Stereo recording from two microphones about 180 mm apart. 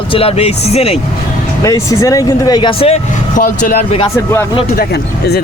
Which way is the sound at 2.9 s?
45° left (ahead or behind).